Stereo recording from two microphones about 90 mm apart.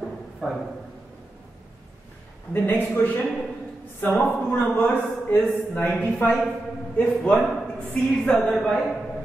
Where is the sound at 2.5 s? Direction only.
20° left (ahead or behind).